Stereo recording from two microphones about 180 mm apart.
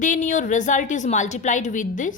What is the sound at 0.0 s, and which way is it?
A woman's voice, 45° left (ahead or behind).